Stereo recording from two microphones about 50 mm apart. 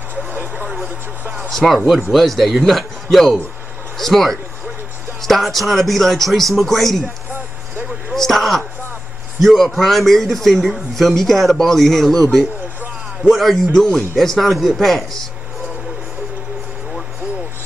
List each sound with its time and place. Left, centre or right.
0.1 s vehicle: right
1.9 s a man's voice: centre
8.1 s a man's voice: centre